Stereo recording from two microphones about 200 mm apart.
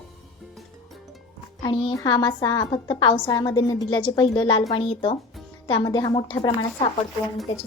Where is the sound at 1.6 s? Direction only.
25° left (ahead or behind).